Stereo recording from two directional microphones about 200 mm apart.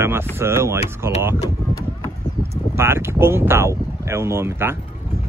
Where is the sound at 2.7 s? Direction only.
10° right (ahead or behind).